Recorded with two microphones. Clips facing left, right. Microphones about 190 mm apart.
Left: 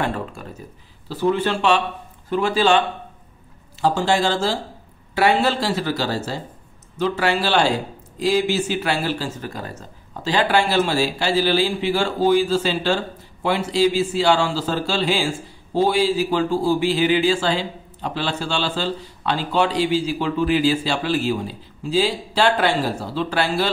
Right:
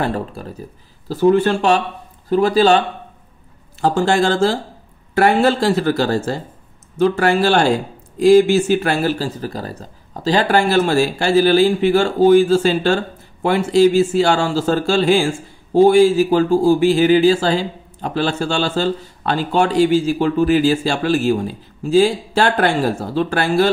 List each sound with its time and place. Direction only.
0.0 s speech: 35° right (ahead or behind)
3.8 s speech: 50° right (ahead or behind)